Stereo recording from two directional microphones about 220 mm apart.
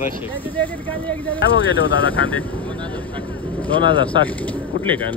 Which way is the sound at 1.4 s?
60° left (ahead or behind).